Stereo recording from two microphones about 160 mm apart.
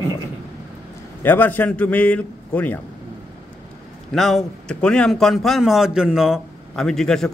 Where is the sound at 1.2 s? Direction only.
10° left (ahead or behind).